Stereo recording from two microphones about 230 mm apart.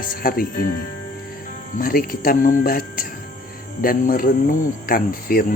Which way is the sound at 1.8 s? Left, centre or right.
Left.